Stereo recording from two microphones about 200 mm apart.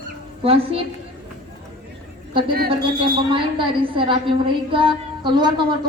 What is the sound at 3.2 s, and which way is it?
A woman's voice, 25° right (ahead or behind).